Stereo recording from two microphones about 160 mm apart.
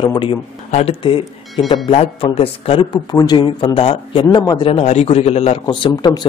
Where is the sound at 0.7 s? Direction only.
40° left (ahead or behind).